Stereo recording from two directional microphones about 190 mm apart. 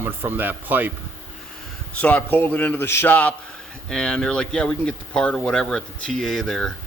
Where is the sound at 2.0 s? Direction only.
10° left (ahead or behind).